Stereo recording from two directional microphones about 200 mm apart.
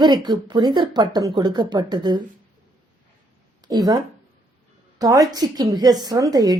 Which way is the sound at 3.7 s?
20° right (ahead or behind).